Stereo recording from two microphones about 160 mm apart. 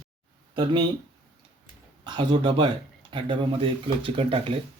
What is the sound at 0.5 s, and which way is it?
Speech, 30° right (ahead or behind).